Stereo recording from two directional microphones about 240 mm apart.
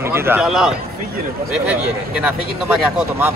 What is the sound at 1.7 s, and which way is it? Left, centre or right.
Speech, centre.